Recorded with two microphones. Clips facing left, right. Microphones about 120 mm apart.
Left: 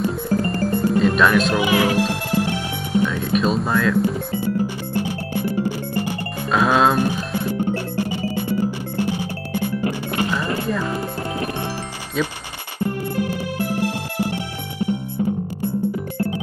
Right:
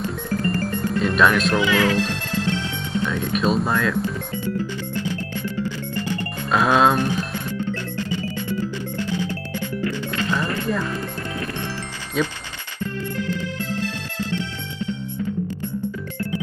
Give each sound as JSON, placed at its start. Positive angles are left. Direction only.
{"t": 0.3, "sound": "music", "side_deg": 30}
{"t": 0.7, "sound": "music", "side_deg": 0}
{"t": 1.5, "sound": "speech", "side_deg": 15}
{"t": 3.1, "sound": "speech", "side_deg": 0}
{"t": 6.5, "sound": "speech", "side_deg": 0}
{"t": 10.3, "sound": "music", "side_deg": 25}